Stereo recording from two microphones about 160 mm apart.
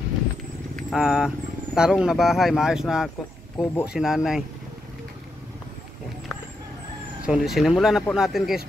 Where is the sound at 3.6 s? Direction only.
15° left (ahead or behind).